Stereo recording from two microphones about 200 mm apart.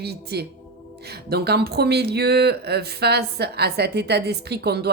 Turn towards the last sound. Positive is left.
turn(degrees=-55)  # may be behind; listen again after turning